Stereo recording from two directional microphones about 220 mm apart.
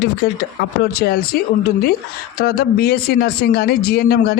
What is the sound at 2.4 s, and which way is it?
Speech, 45° left (ahead or behind).